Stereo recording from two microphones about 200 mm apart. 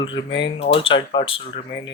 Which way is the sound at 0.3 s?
60° left (ahead or behind).